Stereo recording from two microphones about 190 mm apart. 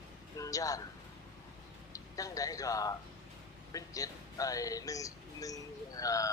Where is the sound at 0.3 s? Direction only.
20° left (ahead or behind).